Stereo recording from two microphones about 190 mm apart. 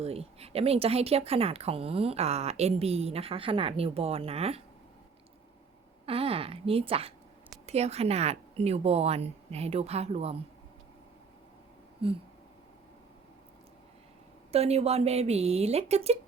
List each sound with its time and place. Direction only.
0.0 s a woman's voice: 30° right (ahead or behind)
6.1 s a woman's voice: 30° right (ahead or behind)
12.0 s a sound: 30° right (ahead or behind)
14.5 s a woman's voice: 35° right (ahead or behind)